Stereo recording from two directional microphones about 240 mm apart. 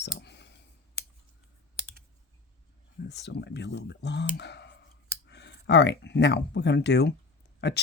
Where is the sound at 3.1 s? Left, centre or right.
Left.